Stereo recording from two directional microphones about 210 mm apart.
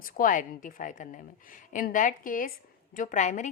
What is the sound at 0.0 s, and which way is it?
A woman's voice, 40° left (ahead or behind).